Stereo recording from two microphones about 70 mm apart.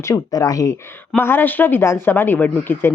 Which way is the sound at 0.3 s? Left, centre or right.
Left.